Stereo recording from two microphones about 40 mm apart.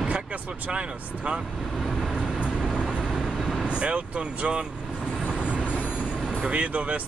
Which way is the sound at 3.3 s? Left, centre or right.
Centre.